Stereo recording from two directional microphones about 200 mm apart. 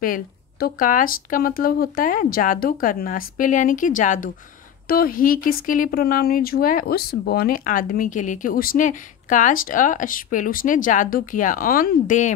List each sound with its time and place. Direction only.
0.0 s speech: 45° left (ahead or behind)